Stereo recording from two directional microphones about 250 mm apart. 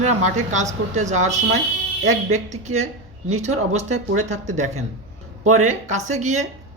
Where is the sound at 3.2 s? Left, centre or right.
Right.